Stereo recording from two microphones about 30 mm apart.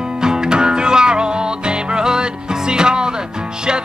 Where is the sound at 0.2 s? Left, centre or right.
Right.